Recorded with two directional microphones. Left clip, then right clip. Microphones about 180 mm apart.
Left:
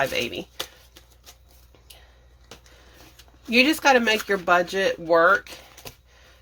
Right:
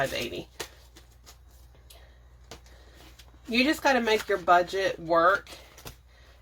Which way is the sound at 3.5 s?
45° left (ahead or behind).